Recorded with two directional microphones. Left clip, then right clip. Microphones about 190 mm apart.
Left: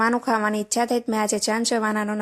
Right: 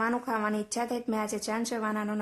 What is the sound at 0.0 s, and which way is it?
Speech, 30° left (ahead or behind).